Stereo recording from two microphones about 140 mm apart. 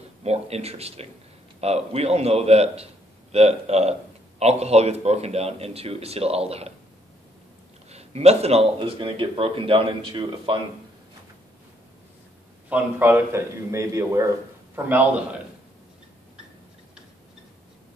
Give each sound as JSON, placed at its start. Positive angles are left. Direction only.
{"t": 0.2, "sound": "speech", "side_deg": -50}
{"t": 7.9, "sound": "speech", "side_deg": -50}
{"t": 12.6, "sound": "a man's voice", "side_deg": -15}
{"t": 14.9, "sound": "a man's voice", "side_deg": -10}